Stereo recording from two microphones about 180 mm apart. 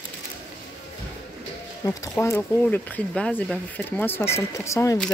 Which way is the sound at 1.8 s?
15° left (ahead or behind).